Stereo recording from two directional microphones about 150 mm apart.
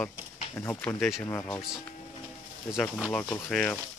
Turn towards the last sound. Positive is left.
turn(degrees=10)  # may be behind; listen again after turning